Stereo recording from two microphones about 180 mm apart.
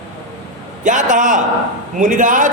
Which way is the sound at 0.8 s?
45° right (ahead or behind).